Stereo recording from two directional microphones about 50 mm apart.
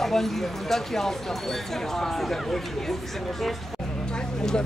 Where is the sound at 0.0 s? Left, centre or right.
Centre.